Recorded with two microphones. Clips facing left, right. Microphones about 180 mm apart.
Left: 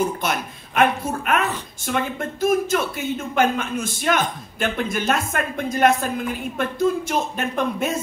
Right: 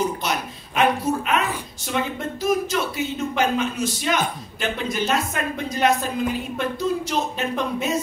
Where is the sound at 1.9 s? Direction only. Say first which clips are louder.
Left 1 dB; 50° left (ahead or behind).